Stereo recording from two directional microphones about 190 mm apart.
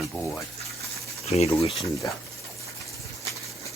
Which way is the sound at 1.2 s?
35° left (ahead or behind).